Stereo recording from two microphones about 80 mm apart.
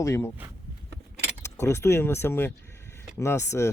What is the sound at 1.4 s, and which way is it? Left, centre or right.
Speech, left.